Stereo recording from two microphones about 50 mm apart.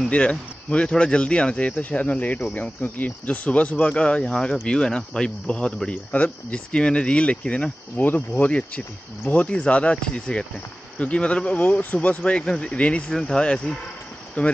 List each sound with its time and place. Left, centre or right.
0.1 s speech: left
8.0 s insect: left
8.3 s speech: left
13.1 s speech: centre
14.4 s insect: left